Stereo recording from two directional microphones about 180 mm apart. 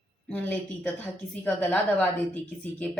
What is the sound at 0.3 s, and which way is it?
Speech, 10° left (ahead or behind).